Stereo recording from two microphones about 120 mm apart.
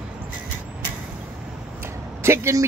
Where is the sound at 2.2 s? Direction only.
25° right (ahead or behind).